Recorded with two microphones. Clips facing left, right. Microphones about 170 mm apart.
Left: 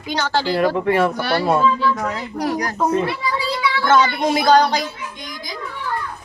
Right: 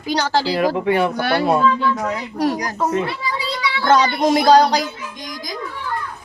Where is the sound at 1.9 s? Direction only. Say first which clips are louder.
Right 1 dB; 10° right (ahead or behind).